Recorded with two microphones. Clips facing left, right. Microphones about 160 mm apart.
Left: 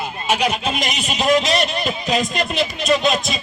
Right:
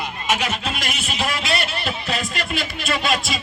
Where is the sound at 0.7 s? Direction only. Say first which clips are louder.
Left 4 dB; 40° left (ahead or behind).